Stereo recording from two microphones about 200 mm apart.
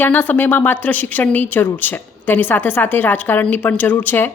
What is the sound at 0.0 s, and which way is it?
A woman's voice, 10° left (ahead or behind).